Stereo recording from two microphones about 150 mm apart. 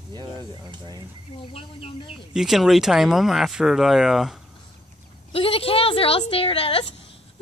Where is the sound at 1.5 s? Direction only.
40° left (ahead or behind).